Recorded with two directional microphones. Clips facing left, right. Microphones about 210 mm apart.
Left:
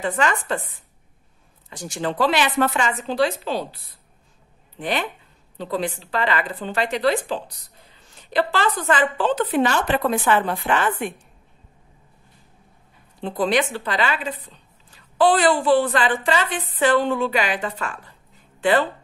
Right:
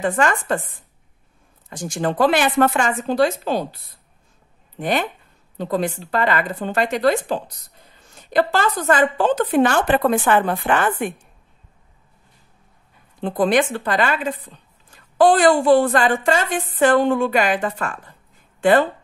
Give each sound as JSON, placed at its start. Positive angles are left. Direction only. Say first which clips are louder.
{"t": 0.0, "sound": "a woman's voice", "louder": "right 3 dB", "side_deg": -50}
{"t": 13.2, "sound": "a woman's voice", "louder": "right 3 dB", "side_deg": -50}